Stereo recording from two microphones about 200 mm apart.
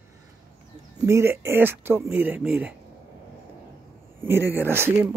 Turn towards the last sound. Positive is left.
turn(degrees=-10)  # may be behind; listen again after turning